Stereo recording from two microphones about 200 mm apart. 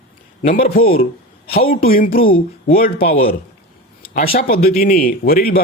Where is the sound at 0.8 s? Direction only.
30° left (ahead or behind).